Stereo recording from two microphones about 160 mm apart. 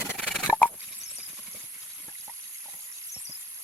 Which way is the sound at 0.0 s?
5° right (ahead or behind).